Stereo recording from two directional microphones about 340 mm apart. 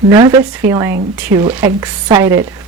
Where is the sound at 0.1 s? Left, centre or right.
Centre.